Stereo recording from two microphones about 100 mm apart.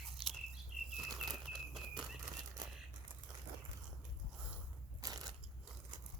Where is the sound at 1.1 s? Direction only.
Centre (ahead or behind).